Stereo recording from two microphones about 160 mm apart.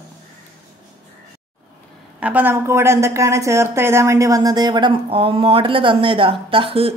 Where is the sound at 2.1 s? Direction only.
10° right (ahead or behind).